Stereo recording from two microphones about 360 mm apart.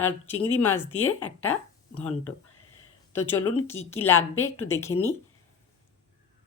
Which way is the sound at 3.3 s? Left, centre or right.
Left.